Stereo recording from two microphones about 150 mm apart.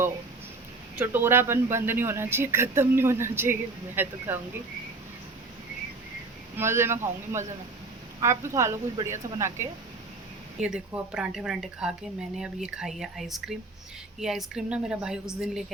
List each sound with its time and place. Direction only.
0.9 s speech: 15° right (ahead or behind)
6.6 s a woman's voice: 15° right (ahead or behind)
10.6 s a woman's voice: 5° right (ahead or behind)